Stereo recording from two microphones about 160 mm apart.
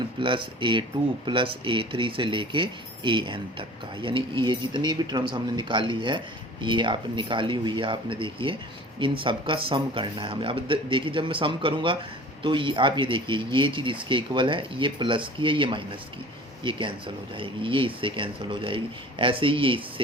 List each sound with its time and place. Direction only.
0.2 s speech: 30° right (ahead or behind)